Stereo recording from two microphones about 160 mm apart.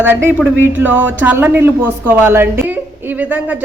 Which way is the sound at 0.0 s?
15° right (ahead or behind).